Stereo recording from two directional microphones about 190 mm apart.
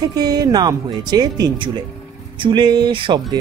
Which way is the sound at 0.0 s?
20° right (ahead or behind).